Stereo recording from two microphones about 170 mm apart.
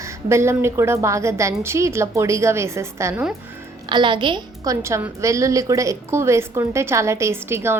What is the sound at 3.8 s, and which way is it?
A woman's voice, 25° right (ahead or behind).